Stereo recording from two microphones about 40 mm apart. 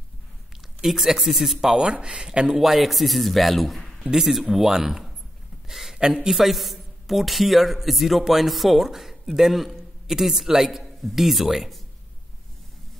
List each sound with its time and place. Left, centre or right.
0.8 s speech: centre
2.5 s a man's voice: centre
5.7 s a sound: centre
5.9 s speech: right
6.2 s a man's voice: centre